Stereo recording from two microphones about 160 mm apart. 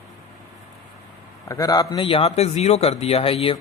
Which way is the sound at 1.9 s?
35° left (ahead or behind).